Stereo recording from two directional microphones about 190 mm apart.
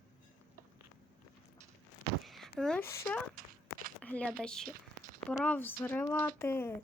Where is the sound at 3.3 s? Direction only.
50° right (ahead or behind).